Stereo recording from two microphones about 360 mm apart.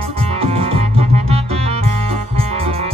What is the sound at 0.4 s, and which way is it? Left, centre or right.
Music, centre.